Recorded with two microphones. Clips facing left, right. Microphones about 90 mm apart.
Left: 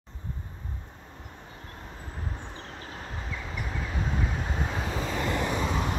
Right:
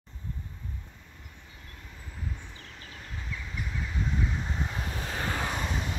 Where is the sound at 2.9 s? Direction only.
60° left (ahead or behind); by 4.6 s 80° left.